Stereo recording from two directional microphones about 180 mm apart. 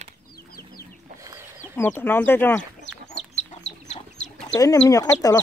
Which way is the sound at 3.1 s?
35° left (ahead or behind).